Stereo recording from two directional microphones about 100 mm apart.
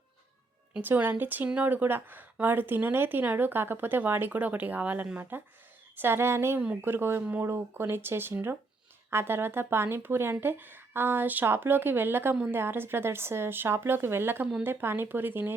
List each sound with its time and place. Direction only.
0.8 s a woman's voice: 20° right (ahead or behind)